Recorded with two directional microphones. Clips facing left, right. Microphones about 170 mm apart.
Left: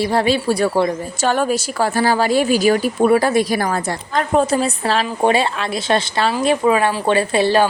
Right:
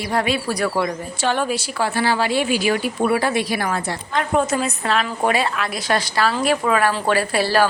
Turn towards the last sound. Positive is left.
turn(degrees=20)  # may be behind; listen again after turning